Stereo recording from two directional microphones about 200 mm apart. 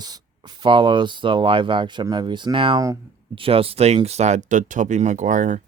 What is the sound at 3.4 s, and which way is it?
Speech, 30° right (ahead or behind).